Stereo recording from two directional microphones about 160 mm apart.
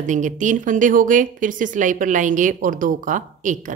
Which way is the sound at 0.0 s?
50° right (ahead or behind).